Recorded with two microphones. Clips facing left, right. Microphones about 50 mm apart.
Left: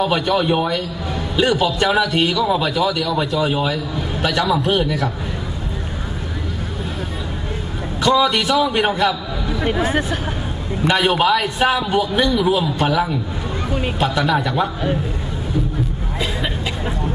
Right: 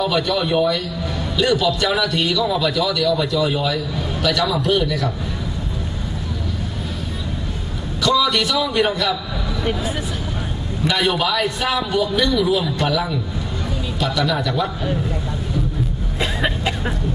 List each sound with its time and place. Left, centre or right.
0.0 s a man's voice: left
8.0 s a man's voice: left
9.8 s speech: left
10.9 s a man's voice: left